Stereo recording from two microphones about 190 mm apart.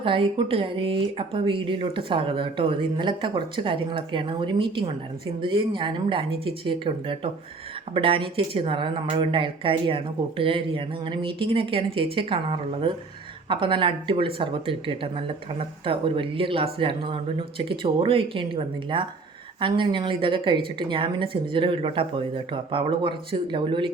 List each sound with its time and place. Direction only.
0.0 s speech: 25° right (ahead or behind)